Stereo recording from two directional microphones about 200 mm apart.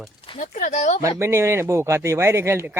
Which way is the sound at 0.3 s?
40° left (ahead or behind).